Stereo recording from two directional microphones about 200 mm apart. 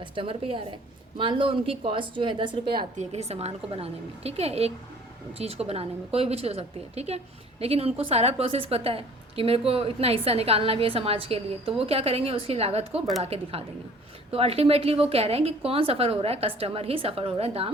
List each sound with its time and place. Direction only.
0.0 s a woman's voice: 25° right (ahead or behind)